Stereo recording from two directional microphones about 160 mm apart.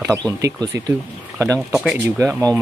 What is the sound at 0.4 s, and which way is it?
Speech, 20° right (ahead or behind).